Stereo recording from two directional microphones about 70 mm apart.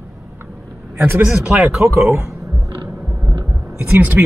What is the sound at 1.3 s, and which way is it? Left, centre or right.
Speech, centre.